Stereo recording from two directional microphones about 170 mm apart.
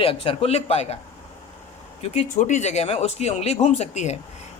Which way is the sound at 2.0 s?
40° left (ahead or behind).